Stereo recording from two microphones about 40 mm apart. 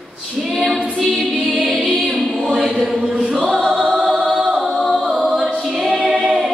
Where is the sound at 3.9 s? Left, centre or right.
Right.